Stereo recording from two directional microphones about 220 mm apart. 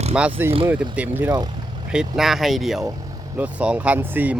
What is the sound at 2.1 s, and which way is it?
Speech, centre (ahead or behind).